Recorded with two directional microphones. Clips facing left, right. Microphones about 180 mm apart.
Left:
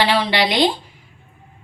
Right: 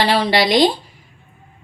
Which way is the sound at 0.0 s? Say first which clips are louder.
Right 2 dB; 40° right (ahead or behind).